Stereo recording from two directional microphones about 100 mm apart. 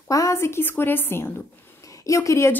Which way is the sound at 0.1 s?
30° left (ahead or behind).